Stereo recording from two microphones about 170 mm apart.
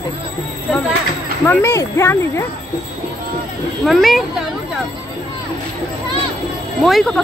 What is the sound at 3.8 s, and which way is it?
Speech, centre (ahead or behind).